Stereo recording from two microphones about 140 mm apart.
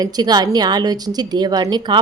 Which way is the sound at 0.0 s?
30° right (ahead or behind).